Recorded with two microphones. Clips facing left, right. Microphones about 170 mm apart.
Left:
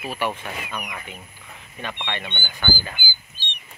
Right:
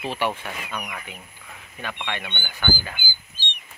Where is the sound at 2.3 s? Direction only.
5° left (ahead or behind).